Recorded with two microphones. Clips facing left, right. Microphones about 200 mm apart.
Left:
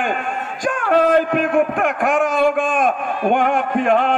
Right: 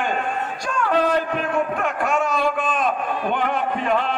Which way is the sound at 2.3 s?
50° left (ahead or behind).